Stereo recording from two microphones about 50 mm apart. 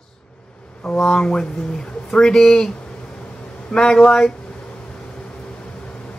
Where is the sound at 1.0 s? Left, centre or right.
Centre.